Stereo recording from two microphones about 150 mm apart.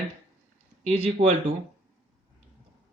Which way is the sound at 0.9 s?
50° right (ahead or behind).